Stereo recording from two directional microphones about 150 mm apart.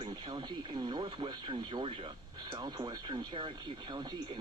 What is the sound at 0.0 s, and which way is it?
Speech, 30° right (ahead or behind).